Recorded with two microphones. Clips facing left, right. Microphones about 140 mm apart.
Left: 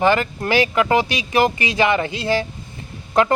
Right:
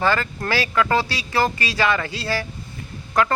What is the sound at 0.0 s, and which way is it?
Speech, 20° left (ahead or behind).